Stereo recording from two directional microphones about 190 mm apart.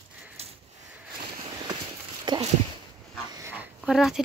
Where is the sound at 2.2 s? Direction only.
25° right (ahead or behind).